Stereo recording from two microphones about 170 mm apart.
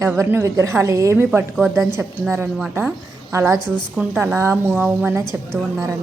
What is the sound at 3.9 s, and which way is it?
Speech, 5° right (ahead or behind).